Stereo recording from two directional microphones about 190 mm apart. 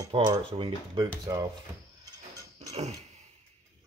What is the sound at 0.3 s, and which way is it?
Speech, 25° right (ahead or behind).